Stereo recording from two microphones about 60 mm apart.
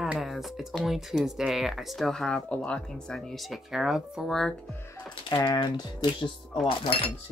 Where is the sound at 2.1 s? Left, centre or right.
Centre.